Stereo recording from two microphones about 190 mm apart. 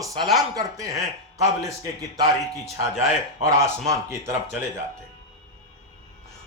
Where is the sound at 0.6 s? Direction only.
15° right (ahead or behind).